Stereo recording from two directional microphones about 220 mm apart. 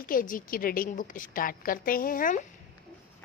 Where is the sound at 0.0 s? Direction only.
40° left (ahead or behind).